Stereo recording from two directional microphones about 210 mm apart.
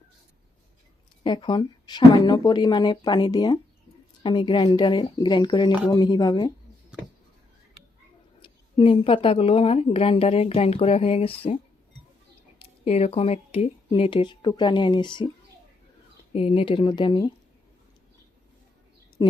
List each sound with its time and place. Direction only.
1.2 s a woman's voice: 20° left (ahead or behind)
8.4 s a woman's voice: 25° left (ahead or behind)
12.8 s a woman's voice: 30° left (ahead or behind)
16.3 s a woman's voice: 25° left (ahead or behind)